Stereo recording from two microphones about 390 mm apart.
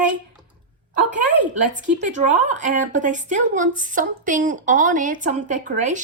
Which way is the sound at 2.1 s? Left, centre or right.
Centre.